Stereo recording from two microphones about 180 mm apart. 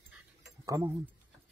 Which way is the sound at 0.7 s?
15° right (ahead or behind).